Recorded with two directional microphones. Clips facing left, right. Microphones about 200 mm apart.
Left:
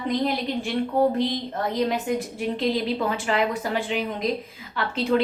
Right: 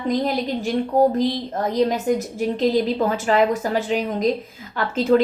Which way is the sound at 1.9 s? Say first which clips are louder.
Right 4 dB; 40° right (ahead or behind).